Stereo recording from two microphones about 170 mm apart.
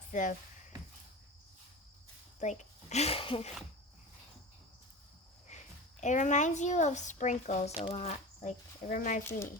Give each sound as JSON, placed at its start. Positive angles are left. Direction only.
{"t": 0.1, "sound": "speech", "side_deg": 50}
{"t": 2.4, "sound": "speech", "side_deg": 45}
{"t": 5.5, "sound": "a sound", "side_deg": 45}
{"t": 6.0, "sound": "speech", "side_deg": 45}